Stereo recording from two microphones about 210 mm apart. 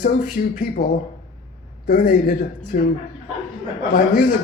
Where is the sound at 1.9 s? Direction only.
40° left (ahead or behind).